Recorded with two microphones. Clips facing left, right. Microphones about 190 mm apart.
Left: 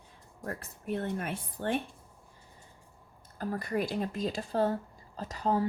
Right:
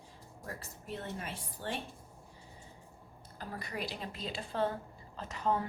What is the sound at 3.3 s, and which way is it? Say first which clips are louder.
Speech: left 9 dB; 50° left (ahead or behind).